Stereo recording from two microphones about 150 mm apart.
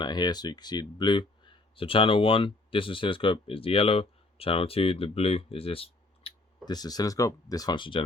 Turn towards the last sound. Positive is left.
turn(degrees=35)  # may be behind; listen again after turning